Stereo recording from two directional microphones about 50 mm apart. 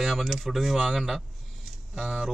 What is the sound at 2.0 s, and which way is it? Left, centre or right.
Speech, centre.